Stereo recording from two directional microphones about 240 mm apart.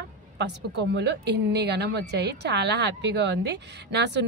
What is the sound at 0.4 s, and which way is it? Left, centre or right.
A woman's voice, right.